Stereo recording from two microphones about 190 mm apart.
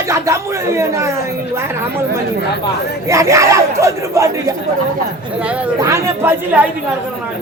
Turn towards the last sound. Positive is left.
turn(degrees=-10)  # may be behind; listen again after turning